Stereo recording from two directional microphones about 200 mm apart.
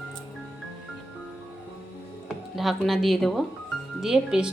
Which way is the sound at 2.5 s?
Centre (ahead or behind).